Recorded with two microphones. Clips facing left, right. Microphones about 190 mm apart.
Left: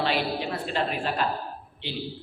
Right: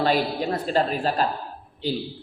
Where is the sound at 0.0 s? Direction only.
40° right (ahead or behind).